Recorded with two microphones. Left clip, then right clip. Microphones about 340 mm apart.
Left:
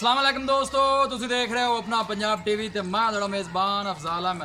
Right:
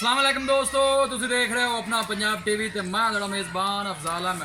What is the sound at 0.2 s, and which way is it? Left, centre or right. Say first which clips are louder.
Speech: right 1 dB; centre.